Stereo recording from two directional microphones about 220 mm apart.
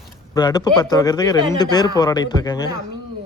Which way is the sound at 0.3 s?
15° left (ahead or behind).